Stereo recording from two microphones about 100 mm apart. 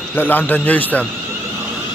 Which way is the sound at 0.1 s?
20° left (ahead or behind).